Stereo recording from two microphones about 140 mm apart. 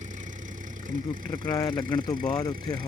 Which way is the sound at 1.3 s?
25° left (ahead or behind).